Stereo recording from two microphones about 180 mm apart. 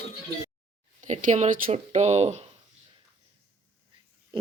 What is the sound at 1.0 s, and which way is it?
Speech, 40° right (ahead or behind).